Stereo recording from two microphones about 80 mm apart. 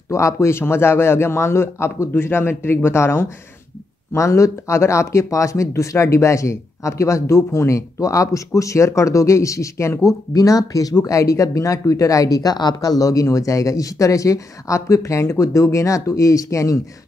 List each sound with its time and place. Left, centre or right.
0.1 s speech: left